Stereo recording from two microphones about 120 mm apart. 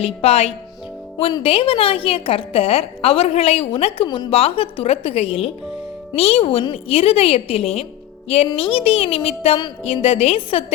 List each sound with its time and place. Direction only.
0.0 s a woman's voice: 60° left (ahead or behind)